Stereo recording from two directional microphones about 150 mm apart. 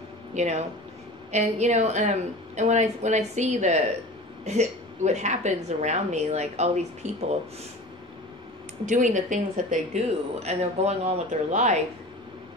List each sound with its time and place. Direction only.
0.3 s speech: 50° right (ahead or behind)
8.8 s speech: 55° right (ahead or behind)